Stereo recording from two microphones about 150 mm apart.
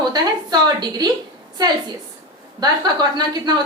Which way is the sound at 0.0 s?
30° right (ahead or behind).